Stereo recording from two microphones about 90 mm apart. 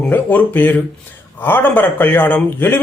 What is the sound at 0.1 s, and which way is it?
A man's voice, 20° left (ahead or behind).